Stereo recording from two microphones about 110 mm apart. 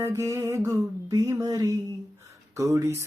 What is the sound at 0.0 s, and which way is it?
Music, 25° right (ahead or behind).